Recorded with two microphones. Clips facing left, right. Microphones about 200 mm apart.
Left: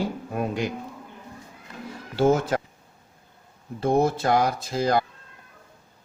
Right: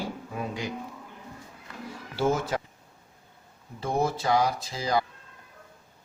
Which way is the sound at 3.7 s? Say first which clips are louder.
Left 6 dB; 55° left (ahead or behind).